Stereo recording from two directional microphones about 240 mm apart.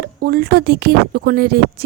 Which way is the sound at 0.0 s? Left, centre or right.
Right.